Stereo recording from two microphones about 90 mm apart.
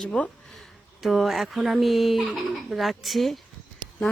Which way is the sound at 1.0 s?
5° right (ahead or behind).